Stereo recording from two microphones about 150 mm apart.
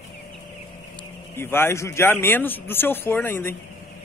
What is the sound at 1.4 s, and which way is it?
A man's voice, 15° left (ahead or behind).